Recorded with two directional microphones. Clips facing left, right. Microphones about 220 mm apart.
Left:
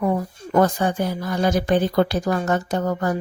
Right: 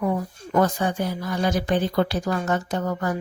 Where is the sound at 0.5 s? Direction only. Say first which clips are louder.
Left 3 dB; 45° left (ahead or behind).